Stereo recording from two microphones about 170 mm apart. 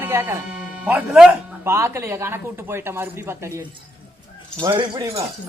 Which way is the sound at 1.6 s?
15° right (ahead or behind).